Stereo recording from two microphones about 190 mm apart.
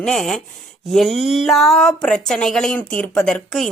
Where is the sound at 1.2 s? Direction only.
35° left (ahead or behind).